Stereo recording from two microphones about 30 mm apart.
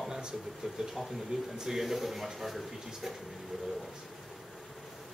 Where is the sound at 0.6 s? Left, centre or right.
Centre.